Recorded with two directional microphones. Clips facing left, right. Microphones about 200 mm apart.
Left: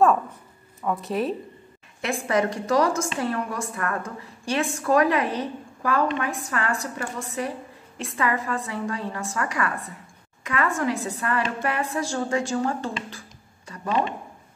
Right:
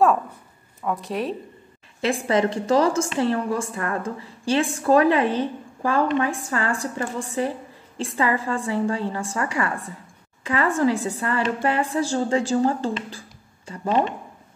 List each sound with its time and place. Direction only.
0.8 s speech: centre (ahead or behind)
2.2 s a woman's voice: 30° right (ahead or behind)